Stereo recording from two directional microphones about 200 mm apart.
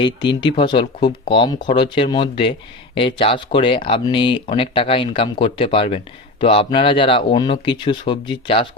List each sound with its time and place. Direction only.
0.0 s speech: 25° left (ahead or behind)